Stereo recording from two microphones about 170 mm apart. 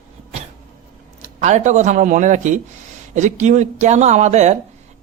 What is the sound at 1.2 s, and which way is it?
Speech, 45° right (ahead or behind).